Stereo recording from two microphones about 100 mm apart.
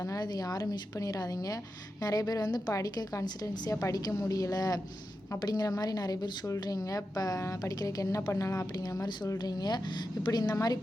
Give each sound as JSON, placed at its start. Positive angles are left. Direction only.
{"t": 0.2, "sound": "a woman's voice", "side_deg": 40}